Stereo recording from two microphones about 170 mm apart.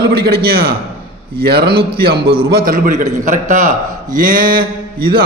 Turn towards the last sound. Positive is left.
turn(degrees=-65)  # may be behind; listen again after turning